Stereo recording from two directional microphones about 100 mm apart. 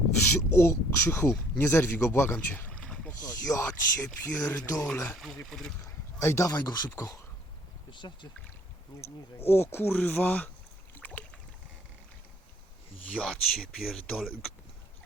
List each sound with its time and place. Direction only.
0.3 s speech: 25° left (ahead or behind); by 3.1 s 10° left (ahead or behind)
3.1 s speech: 35° left (ahead or behind)
5.1 s speech: centre (ahead or behind)
5.8 s a sound: 25° left (ahead or behind)
6.5 s speech: 40° left (ahead or behind)
6.9 s speech: 30° left (ahead or behind)
7.9 s speech: 50° left (ahead or behind)
9.5 s speech: 25° left (ahead or behind)
10.9 s boat: 15° left (ahead or behind)
13.1 s speech: 5° left (ahead or behind)